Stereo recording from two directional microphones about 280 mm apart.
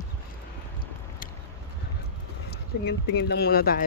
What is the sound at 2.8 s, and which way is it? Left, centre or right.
Speech, left.